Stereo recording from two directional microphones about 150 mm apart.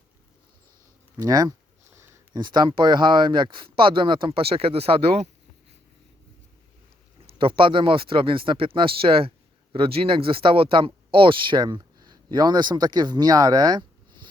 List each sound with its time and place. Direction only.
1.2 s speech: 25° right (ahead or behind); by 5.3 s 45° right (ahead or behind)
7.3 s speech: 35° right (ahead or behind)